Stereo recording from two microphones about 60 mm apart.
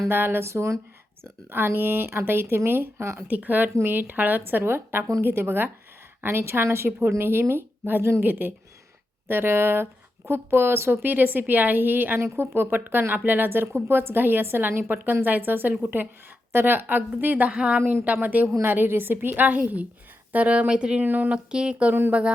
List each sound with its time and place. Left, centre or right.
0.1 s a woman's voice: right
1.2 s speech: right
3.2 s a woman's voice: right
21.0 s speech: right
21.3 s speech: centre